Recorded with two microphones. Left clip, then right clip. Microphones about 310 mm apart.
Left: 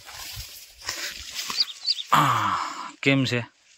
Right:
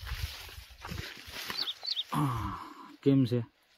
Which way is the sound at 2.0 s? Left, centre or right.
Left.